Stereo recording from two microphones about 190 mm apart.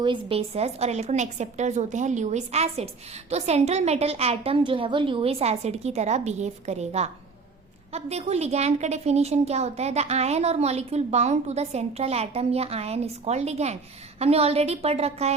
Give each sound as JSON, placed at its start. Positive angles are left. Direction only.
{"t": 0.0, "sound": "a woman's voice", "side_deg": -30}